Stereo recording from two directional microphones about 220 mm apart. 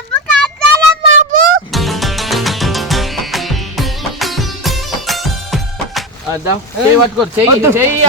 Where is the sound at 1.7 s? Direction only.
Centre (ahead or behind).